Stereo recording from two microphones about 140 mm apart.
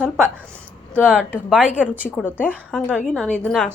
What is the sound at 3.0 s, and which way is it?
Speech, 10° left (ahead or behind).